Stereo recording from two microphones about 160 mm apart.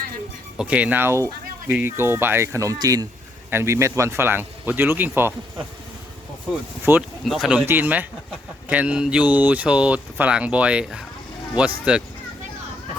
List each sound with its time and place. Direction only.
0.5 s speech: 5° right (ahead or behind)
6.9 s speech: 15° right (ahead or behind)
7.3 s speech: centre (ahead or behind)
7.6 s speech: 10° right (ahead or behind)